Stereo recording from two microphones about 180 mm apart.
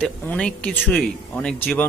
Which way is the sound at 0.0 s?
5° left (ahead or behind).